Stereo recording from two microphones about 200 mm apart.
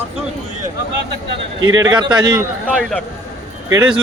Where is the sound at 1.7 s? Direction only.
20° right (ahead or behind).